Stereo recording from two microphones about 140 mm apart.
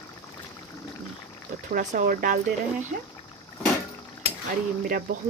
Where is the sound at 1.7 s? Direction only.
65° right (ahead or behind).